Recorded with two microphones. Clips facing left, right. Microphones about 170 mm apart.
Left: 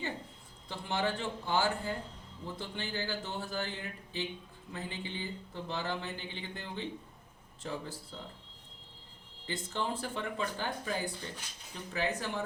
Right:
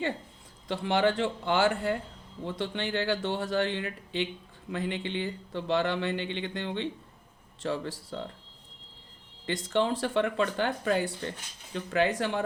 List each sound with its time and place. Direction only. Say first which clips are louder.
0.7 s speech: right 8 dB; 90° right
9.5 s speech: right 8 dB; 90° right; by 11.3 s 70° right (ahead or behind)
11.7 s speech: right 8 dB; 80° right